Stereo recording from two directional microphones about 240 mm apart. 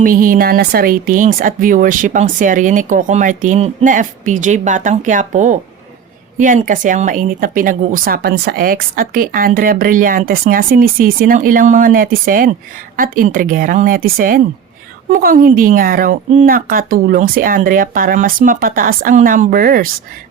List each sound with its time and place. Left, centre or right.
0.0 s speech: right